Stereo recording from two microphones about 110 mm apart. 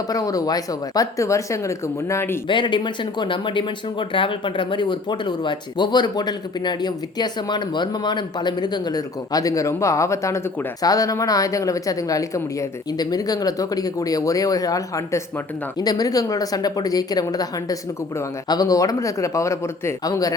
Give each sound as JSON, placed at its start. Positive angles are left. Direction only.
{"t": 0.1, "sound": "speech", "side_deg": 35}
{"t": 2.5, "sound": "speech", "side_deg": 45}